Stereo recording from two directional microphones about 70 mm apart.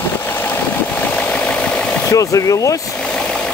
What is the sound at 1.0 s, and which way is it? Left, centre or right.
Engine, centre.